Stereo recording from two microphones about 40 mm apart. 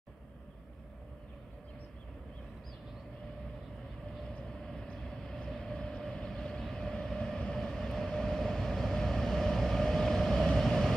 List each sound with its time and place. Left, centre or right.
4.3 s vehicle: left
4.9 s train: centre
7.5 s vehicle: centre